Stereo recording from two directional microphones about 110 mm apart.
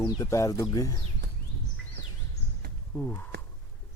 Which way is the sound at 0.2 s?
25° left (ahead or behind).